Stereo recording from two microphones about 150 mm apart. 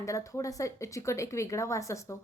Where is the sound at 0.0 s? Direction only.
20° left (ahead or behind).